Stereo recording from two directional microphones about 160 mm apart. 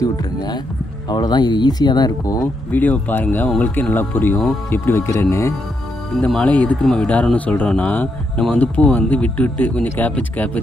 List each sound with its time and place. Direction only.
0.0 s speech: 25° left (ahead or behind)
2.7 s speech: 10° left (ahead or behind)
6.1 s speech: 5° left (ahead or behind)